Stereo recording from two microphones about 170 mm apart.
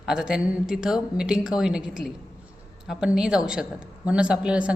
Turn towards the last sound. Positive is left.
turn(degrees=-5)  # may be behind; listen again after turning